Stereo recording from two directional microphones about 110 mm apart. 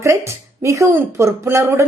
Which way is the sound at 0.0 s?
25° right (ahead or behind).